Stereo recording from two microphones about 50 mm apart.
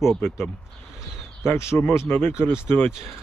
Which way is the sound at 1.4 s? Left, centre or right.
Left.